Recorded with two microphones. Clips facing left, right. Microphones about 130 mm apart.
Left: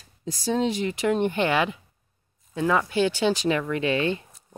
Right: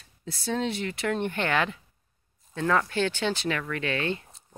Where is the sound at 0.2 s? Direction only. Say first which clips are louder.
Left 5 dB; 15° left (ahead or behind).